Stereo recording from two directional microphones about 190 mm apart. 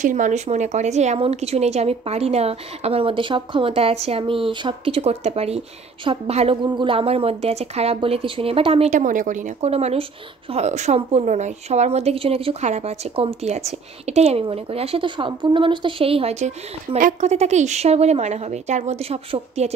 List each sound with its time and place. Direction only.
0.0 s a woman's voice: 40° right (ahead or behind)